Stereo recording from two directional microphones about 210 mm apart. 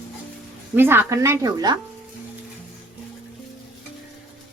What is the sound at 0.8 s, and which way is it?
Speech, 10° right (ahead or behind).